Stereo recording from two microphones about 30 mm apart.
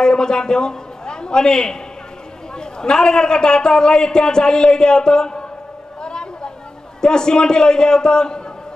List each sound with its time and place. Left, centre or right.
0.0 s a man's voice: left
6.0 s a sound: left
7.0 s a man's voice: left